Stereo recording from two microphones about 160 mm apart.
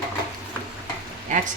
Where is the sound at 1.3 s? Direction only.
50° right (ahead or behind).